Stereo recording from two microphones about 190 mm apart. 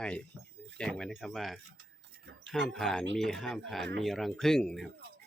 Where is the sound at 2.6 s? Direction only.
Centre (ahead or behind).